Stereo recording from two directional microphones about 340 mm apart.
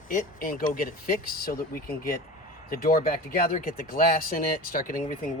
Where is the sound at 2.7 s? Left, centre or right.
Left.